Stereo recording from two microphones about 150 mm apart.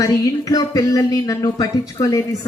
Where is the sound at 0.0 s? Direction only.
25° left (ahead or behind).